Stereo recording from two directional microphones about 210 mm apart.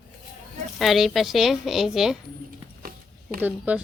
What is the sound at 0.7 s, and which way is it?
Speech, centre (ahead or behind).